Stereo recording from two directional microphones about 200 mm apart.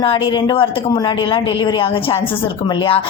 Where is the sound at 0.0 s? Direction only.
25° left (ahead or behind).